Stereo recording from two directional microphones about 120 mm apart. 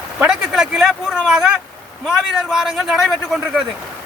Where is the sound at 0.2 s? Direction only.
5° right (ahead or behind).